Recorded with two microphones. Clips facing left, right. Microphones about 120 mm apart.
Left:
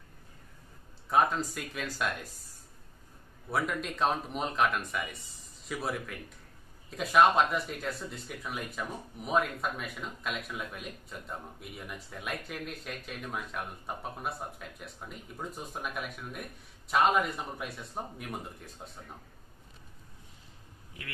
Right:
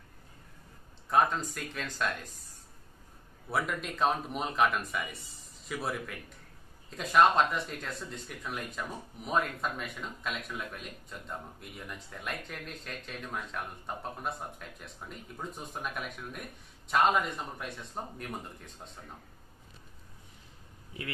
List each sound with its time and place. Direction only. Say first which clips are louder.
1.1 s speech: even; centre (ahead or behind)
3.4 s speech: left 1 dB; centre (ahead or behind)